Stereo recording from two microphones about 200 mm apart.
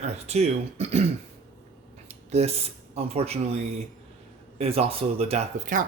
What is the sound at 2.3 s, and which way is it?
Speech, 30° right (ahead or behind).